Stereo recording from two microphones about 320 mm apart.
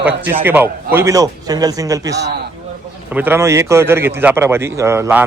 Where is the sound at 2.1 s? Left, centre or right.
Right.